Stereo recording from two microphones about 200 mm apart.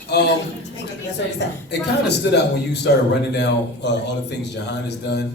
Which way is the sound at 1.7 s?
55° left (ahead or behind).